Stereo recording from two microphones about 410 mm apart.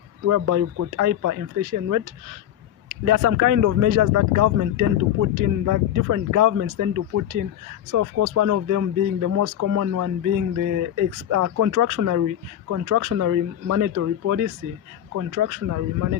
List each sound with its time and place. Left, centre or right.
0.3 s speech: right